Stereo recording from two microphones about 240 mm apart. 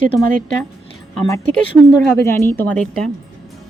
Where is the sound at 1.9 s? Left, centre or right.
Centre.